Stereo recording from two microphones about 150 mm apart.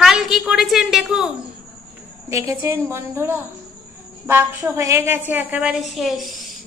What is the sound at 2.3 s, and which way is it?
A woman's voice, 20° right (ahead or behind).